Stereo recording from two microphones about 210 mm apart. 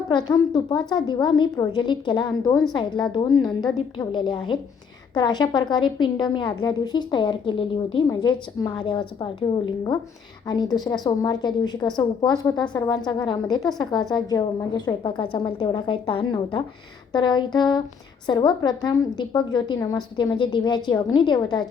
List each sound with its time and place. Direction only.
0.1 s a woman's voice: 20° left (ahead or behind)
3.3 s a woman's voice: centre (ahead or behind)
3.9 s a woman's voice: 20° left (ahead or behind)
10.4 s a woman's voice: 20° left (ahead or behind)